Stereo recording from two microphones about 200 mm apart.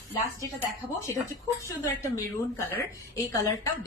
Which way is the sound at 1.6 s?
15° left (ahead or behind).